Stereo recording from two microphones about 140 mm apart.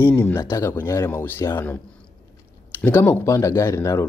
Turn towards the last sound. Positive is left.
turn(degrees=20)  # may be behind; listen again after turning